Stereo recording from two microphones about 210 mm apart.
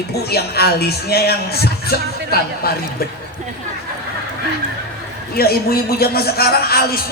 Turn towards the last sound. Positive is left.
turn(degrees=45)  # may be behind; listen again after turning